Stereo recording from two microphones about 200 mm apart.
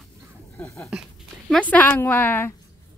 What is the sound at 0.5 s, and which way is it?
A woman's voice, 10° left (ahead or behind).